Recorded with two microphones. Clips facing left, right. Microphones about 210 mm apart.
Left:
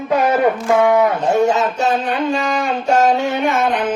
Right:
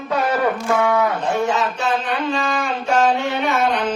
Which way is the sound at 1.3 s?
45° left (ahead or behind).